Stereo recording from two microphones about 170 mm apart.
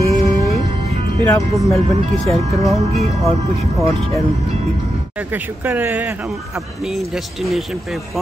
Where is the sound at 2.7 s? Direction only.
40° right (ahead or behind).